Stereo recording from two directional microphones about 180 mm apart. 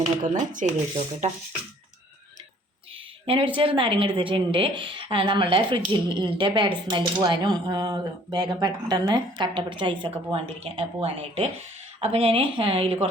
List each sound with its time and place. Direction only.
0.5 s speech: 40° right (ahead or behind)
3.2 s speech: 30° right (ahead or behind)